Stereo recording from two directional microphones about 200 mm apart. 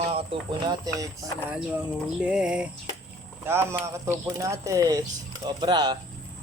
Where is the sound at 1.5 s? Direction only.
5° right (ahead or behind).